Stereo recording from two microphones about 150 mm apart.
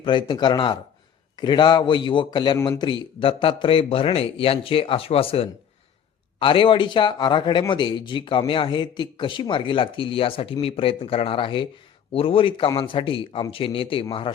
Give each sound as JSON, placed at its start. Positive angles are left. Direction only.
{"t": 0.0, "sound": "speech", "side_deg": 30}